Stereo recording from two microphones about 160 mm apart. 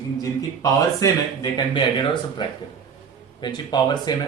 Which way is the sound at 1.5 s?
30° left (ahead or behind).